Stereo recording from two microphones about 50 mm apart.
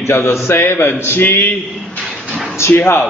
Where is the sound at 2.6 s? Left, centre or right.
Left.